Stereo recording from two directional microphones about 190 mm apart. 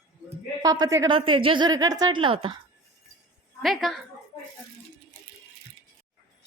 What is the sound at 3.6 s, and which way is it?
Speech, centre (ahead or behind).